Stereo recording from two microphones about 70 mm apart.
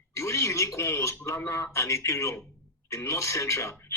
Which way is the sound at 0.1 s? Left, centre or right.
Left.